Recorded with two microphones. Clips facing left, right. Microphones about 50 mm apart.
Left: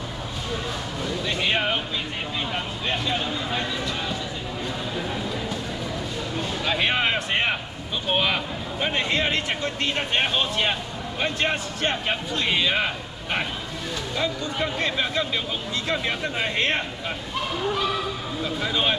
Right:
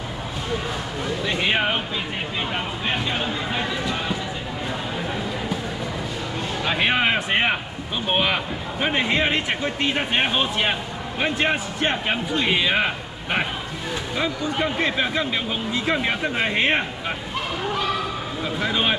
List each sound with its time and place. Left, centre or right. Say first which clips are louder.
1.2 s a man's voice: right 2 dB; centre
6.6 s a man's voice: right 3 dB; centre
18.4 s a man's voice: right 2 dB; centre